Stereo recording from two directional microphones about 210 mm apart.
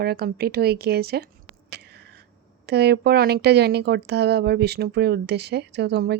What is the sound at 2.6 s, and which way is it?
Speech, 50° right (ahead or behind).